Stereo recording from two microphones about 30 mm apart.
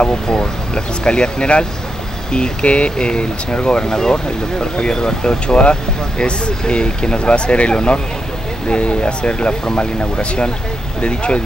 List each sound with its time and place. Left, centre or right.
0.0 s speech: left
3.1 s speech: left
5.6 s speech: left